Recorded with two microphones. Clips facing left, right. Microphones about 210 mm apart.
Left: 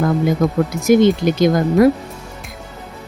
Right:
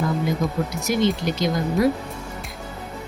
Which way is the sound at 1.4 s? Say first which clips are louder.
Left 8 dB; 55° left (ahead or behind).